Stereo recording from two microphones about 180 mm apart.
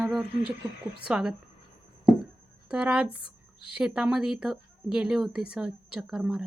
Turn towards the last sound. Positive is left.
turn(degrees=-5)  # may be behind; listen again after turning